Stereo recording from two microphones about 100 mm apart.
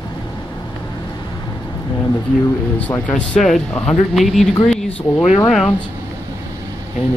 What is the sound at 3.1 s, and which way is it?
Speech, 5° left (ahead or behind).